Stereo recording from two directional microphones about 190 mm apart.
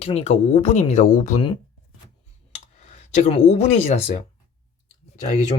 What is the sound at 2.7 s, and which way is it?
Speech, 35° left (ahead or behind).